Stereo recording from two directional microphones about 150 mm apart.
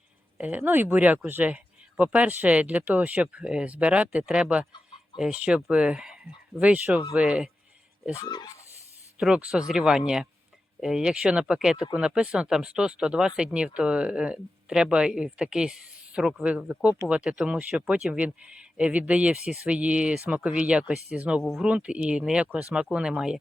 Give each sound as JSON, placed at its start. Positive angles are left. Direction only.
{"t": 0.3, "sound": "speech", "side_deg": -10}
{"t": 8.1, "sound": "speech", "side_deg": 25}
{"t": 9.1, "sound": "speech", "side_deg": -5}